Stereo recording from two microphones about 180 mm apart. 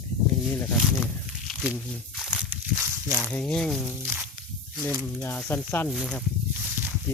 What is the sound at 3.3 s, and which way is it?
Speech, 5° left (ahead or behind).